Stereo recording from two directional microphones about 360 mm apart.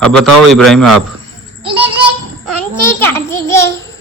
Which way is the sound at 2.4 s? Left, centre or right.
Centre.